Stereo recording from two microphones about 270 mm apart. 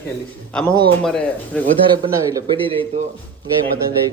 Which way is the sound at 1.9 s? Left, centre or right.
Centre.